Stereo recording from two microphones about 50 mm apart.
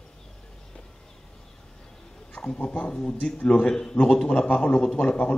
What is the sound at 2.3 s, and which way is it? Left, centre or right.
A man's voice, left.